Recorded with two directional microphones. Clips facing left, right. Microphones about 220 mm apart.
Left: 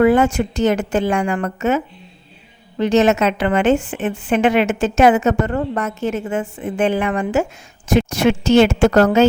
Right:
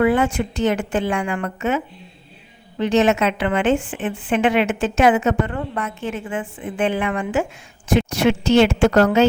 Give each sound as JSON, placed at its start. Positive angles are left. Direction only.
{"t": 0.0, "sound": "a woman's voice", "side_deg": 40}